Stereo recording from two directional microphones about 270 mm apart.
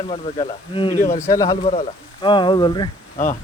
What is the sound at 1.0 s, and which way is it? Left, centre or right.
A man's voice, centre.